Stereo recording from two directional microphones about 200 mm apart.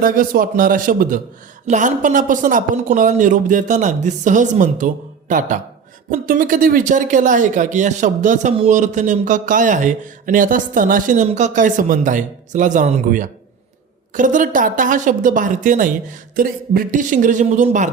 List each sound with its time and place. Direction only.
0.0 s a man's voice: 45° right (ahead or behind)